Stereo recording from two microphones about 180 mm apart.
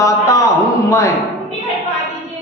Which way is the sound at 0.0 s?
20° left (ahead or behind).